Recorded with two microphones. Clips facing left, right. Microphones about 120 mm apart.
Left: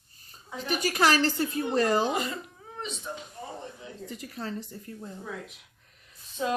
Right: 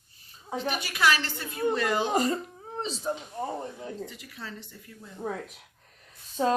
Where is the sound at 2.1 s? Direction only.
40° right (ahead or behind).